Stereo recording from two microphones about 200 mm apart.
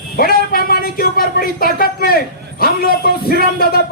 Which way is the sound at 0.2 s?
50° left (ahead or behind).